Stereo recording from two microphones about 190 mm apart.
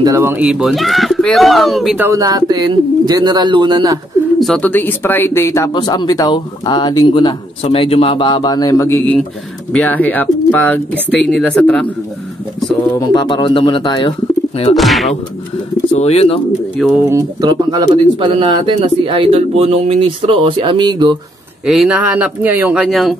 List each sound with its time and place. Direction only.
0.0 s speech: 15° right (ahead or behind)
2.0 s speech: 20° right (ahead or behind)
4.4 s a man's voice: 5° left (ahead or behind)
12.9 s a man's voice: 25° left (ahead or behind)
14.8 s speech: centre (ahead or behind)
15.9 s speech: 35° left (ahead or behind)
16.7 s speech: centre (ahead or behind)
17.1 s speech: 20° right (ahead or behind)
21.6 s speech: 5° right (ahead or behind)